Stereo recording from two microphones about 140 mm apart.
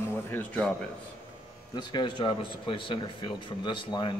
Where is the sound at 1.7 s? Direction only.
35° left (ahead or behind).